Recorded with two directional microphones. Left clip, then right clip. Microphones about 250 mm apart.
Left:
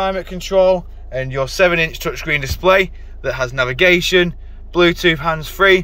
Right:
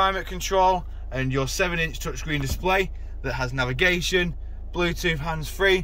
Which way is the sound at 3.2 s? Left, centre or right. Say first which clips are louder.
Left 9 dB; left.